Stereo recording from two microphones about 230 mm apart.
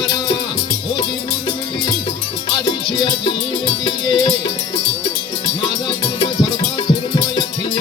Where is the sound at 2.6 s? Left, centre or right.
Centre.